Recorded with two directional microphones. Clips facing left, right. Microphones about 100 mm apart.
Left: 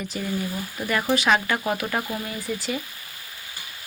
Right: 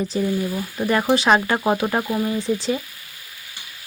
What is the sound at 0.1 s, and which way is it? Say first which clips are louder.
Speech: right 4 dB; 30° right (ahead or behind).